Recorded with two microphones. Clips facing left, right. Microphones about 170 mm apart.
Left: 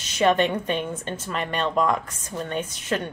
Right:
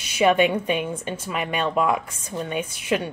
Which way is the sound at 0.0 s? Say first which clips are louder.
Right 2 dB; 10° right (ahead or behind).